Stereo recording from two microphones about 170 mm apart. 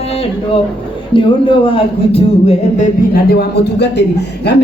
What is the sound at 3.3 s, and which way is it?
A man's voice, 75° left (ahead or behind).